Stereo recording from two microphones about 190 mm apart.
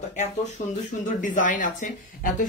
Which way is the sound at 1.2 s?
45° left (ahead or behind).